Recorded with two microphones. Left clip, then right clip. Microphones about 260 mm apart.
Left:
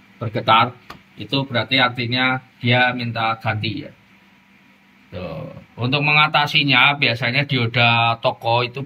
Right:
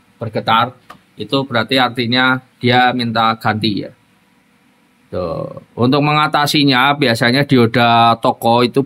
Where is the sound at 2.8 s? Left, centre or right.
Centre.